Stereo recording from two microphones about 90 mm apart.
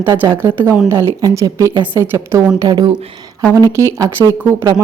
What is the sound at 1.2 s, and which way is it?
Speech, 40° right (ahead or behind).